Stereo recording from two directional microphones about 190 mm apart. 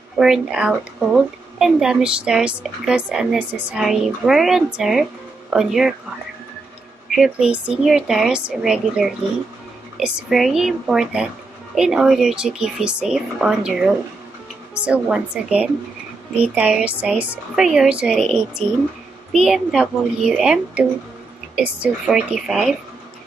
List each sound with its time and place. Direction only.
0.2 s speech: 5° right (ahead or behind)
7.1 s speech: centre (ahead or behind)